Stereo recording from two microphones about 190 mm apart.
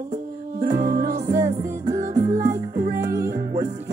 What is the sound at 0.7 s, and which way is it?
Music, 50° right (ahead or behind).